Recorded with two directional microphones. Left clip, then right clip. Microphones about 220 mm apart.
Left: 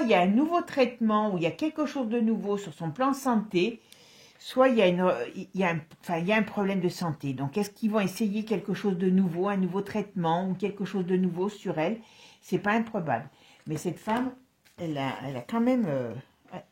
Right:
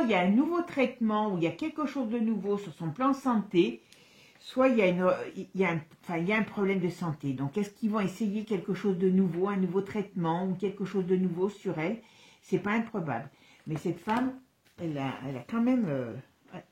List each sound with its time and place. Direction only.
0.0 s speech: 40° left (ahead or behind)
15.0 s speech: 45° left (ahead or behind)